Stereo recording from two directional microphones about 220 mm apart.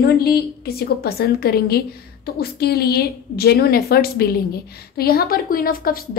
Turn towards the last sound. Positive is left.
turn(degrees=40)  # may be behind; listen again after turning